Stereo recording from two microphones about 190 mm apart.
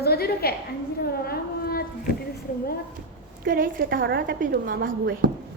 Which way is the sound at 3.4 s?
50° right (ahead or behind).